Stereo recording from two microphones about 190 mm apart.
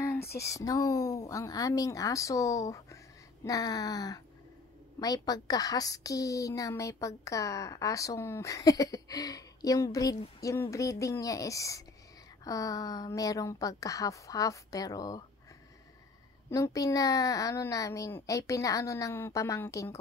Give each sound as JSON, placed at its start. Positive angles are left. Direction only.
{"t": 0.0, "sound": "a sound", "side_deg": 15}
{"t": 0.4, "sound": "a woman's voice", "side_deg": 15}
{"t": 16.4, "sound": "a woman's voice", "side_deg": 15}